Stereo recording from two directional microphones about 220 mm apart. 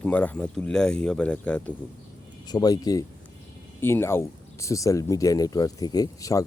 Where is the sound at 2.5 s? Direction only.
15° left (ahead or behind).